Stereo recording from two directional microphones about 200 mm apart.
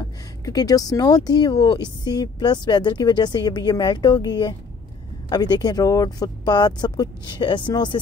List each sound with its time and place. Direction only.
0.5 s speech: 20° left (ahead or behind)